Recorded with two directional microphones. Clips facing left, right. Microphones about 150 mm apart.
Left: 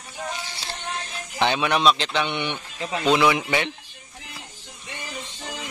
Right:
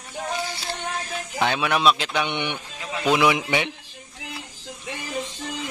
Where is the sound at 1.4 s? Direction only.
5° right (ahead or behind).